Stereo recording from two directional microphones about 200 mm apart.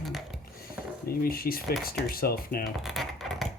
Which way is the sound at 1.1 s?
45° left (ahead or behind).